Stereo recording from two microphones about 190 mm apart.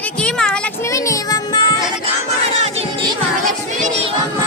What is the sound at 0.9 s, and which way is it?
Child singing, 20° left (ahead or behind).